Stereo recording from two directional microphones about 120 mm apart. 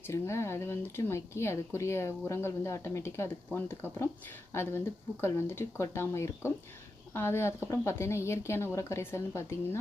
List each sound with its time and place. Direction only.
0.1 s speech: 25° left (ahead or behind)